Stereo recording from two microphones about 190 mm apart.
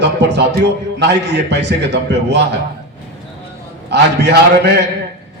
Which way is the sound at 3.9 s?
65° right (ahead or behind).